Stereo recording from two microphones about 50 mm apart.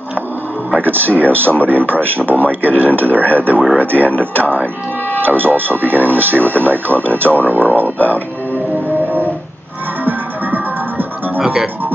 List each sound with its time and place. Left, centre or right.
0.7 s speech: right
7.4 s a sound: right
8.0 s music: left
10.0 s music: right